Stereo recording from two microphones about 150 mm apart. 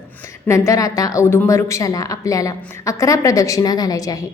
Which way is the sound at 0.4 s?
20° left (ahead or behind).